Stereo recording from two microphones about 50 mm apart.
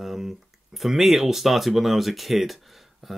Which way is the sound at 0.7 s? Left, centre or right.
Centre.